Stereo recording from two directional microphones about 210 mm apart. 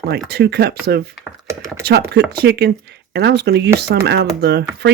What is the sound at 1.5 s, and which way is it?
Computer keyboard, 15° right (ahead or behind).